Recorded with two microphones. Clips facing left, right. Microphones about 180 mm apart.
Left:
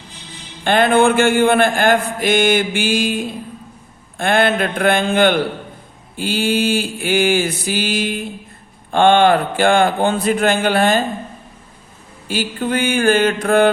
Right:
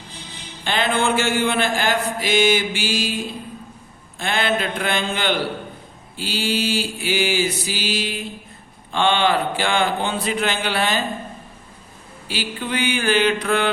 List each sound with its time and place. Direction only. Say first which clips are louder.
0.6 s mantra: left 8 dB; 55° left (ahead or behind)
4.2 s mantra: left 6 dB; 55° left (ahead or behind)
12.3 s mantra: left 6 dB; 45° left (ahead or behind)